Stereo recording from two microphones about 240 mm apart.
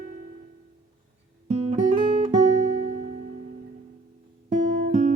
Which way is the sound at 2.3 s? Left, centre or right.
Right.